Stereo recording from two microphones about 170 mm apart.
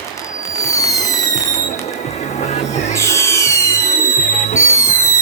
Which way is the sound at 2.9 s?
15° left (ahead or behind).